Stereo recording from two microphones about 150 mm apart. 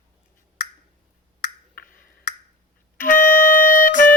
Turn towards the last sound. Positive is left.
turn(degrees=60)  # may be behind; listen again after turning